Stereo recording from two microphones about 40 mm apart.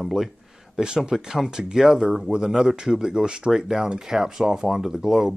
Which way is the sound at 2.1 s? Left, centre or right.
Centre.